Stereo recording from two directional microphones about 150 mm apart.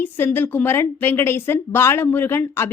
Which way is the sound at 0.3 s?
10° left (ahead or behind).